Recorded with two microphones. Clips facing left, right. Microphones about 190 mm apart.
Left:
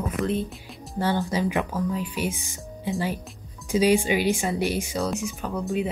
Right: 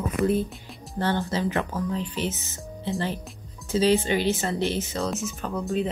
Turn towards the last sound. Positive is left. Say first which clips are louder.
# left 1 dB
turn(degrees=10)  # may be behind; listen again after turning